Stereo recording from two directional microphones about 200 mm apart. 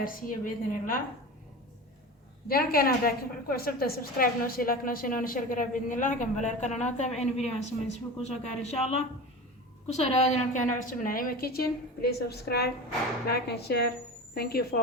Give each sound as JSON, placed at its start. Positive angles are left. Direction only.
{"t": 0.0, "sound": "a woman's voice", "side_deg": 45}
{"t": 2.5, "sound": "a woman's voice", "side_deg": 45}